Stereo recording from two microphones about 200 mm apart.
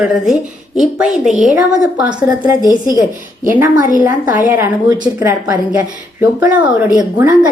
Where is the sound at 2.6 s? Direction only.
20° left (ahead or behind).